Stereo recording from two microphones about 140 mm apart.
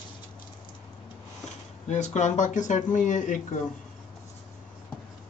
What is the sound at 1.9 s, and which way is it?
Speech, 55° left (ahead or behind).